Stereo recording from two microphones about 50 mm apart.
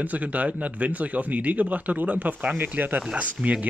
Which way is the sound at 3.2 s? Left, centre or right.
Right.